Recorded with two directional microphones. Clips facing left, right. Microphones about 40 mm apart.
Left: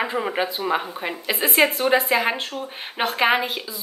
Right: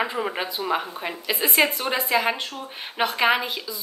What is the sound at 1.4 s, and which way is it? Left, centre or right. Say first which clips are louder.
Speech: left 3 dB; left.